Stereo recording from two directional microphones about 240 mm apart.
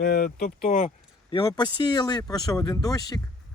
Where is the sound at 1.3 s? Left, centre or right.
Centre.